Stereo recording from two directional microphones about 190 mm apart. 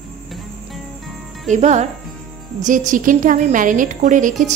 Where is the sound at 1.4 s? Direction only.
40° right (ahead or behind).